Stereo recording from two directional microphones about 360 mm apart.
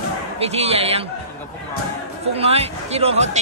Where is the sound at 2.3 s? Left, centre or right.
Centre.